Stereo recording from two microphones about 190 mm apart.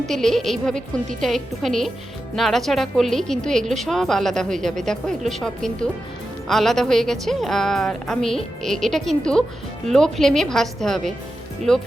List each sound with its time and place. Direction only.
0.1 s a woman's voice: centre (ahead or behind)